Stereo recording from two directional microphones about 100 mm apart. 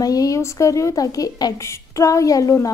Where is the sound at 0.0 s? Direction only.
35° left (ahead or behind).